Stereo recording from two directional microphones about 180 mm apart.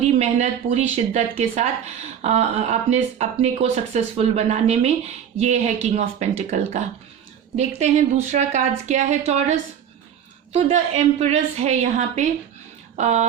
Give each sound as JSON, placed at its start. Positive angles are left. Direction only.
{"t": 0.0, "sound": "speech", "side_deg": -35}